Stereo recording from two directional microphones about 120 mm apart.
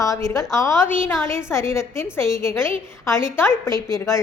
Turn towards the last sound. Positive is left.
turn(degrees=25)  # may be behind; listen again after turning